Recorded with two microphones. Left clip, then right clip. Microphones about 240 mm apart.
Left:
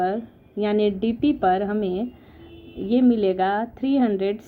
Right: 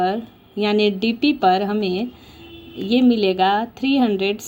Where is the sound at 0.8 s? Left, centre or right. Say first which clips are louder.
Right 3 dB; centre.